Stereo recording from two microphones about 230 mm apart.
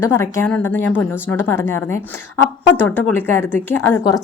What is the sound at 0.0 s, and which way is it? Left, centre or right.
A woman's voice, centre.